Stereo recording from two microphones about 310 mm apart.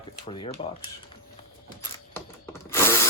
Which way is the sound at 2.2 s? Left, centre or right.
Centre.